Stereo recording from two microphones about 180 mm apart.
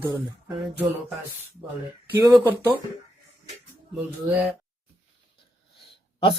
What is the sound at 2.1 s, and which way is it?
Speech, 15° right (ahead or behind).